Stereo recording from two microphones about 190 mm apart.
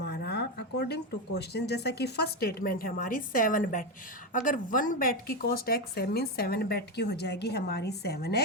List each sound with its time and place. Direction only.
0.0 s speech: 60° left (ahead or behind)